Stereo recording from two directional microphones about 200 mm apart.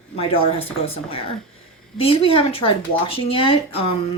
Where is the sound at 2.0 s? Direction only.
30° left (ahead or behind).